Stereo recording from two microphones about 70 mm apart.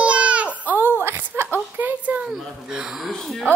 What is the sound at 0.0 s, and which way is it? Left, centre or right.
Baby cry, centre.